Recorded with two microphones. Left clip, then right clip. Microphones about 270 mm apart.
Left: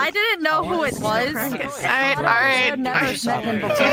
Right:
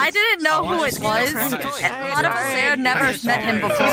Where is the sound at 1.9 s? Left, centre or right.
Left.